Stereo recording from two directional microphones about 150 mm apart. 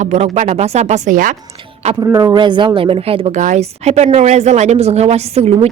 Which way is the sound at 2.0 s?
20° right (ahead or behind).